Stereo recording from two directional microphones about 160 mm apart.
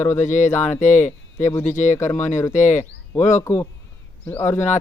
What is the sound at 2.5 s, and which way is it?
Speech, 50° left (ahead or behind).